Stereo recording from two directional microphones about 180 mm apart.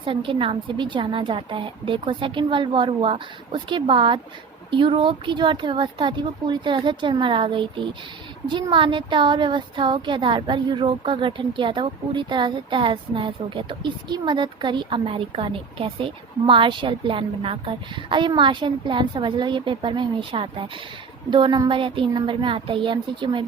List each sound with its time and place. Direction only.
0.0 s speech: 30° right (ahead or behind)